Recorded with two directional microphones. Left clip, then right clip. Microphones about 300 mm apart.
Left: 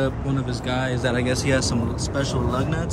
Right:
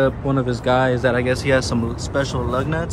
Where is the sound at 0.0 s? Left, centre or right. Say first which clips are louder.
Right 7 dB; centre.